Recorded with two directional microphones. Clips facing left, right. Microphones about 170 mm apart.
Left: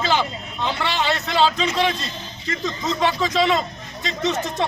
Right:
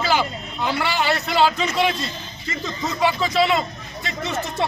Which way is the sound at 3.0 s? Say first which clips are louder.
Right 1 dB; 10° right (ahead or behind).